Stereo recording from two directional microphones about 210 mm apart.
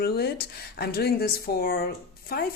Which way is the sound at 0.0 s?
50° left (ahead or behind).